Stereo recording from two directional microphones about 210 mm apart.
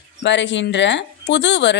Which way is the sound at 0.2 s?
55° left (ahead or behind).